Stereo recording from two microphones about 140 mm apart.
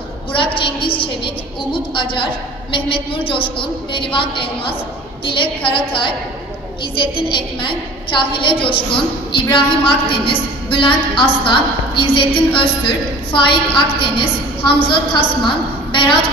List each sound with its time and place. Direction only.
0.3 s a woman's voice: 35° left (ahead or behind)
7.2 s a woman's voice: 35° left (ahead or behind)